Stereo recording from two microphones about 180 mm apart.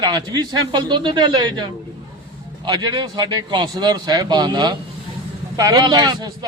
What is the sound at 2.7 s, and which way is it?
A man's voice, 25° right (ahead or behind).